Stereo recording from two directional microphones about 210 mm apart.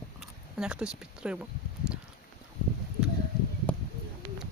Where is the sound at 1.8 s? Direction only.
5° right (ahead or behind).